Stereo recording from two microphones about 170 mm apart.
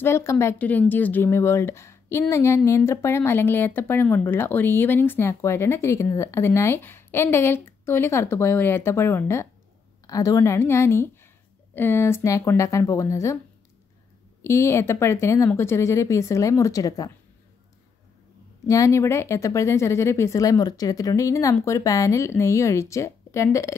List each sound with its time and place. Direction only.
0.0 s speech: 15° left (ahead or behind)
14.4 s speech: 15° left (ahead or behind)
18.7 s speech: 20° left (ahead or behind)